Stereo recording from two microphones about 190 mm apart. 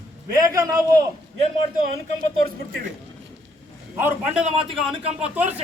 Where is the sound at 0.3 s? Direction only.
20° right (ahead or behind).